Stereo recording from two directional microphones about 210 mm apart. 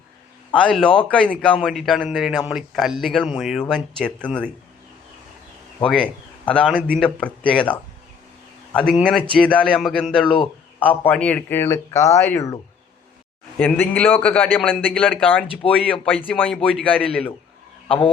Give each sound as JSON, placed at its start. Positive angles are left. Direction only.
{"t": 0.5, "sound": "speech", "side_deg": 5}
{"t": 5.8, "sound": "speech", "side_deg": 5}
{"t": 10.2, "sound": "a man's voice", "side_deg": 25}
{"t": 10.8, "sound": "speech", "side_deg": 10}
{"t": 13.6, "sound": "speech", "side_deg": 5}